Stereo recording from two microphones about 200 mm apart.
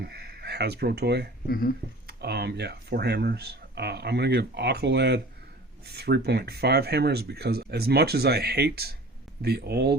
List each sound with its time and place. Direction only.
0.0 s speech: 50° right (ahead or behind)
1.5 s speech: 45° left (ahead or behind)
2.0 s speech: 55° right (ahead or behind)